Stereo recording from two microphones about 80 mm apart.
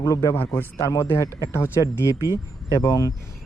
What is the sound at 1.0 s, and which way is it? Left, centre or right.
Speech, left.